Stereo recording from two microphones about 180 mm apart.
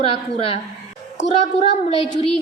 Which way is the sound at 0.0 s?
30° left (ahead or behind).